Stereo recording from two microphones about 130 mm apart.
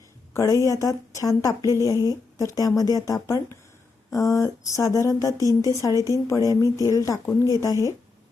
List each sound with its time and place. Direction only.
0.3 s speech: 25° left (ahead or behind)